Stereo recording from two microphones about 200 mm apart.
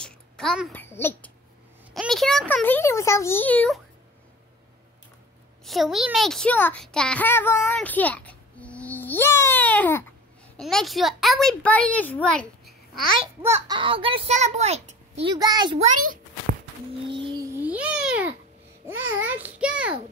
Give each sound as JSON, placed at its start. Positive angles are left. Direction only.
{"t": 0.0, "sound": "a child's voice", "side_deg": 5}
{"t": 5.7, "sound": "a child's voice", "side_deg": 0}
{"t": 13.2, "sound": "speech", "side_deg": -10}
{"t": 13.7, "sound": "a child's voice", "side_deg": -25}
{"t": 15.3, "sound": "a child's voice", "side_deg": -20}
{"t": 15.8, "sound": "a child's voice", "side_deg": -45}
{"t": 17.1, "sound": "a sound", "side_deg": -25}
{"t": 17.6, "sound": "babbling", "side_deg": -5}
{"t": 18.9, "sound": "a child's voice", "side_deg": -10}